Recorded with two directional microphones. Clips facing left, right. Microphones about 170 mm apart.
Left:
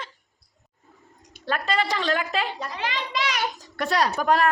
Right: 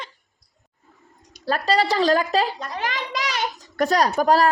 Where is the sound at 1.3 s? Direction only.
35° right (ahead or behind).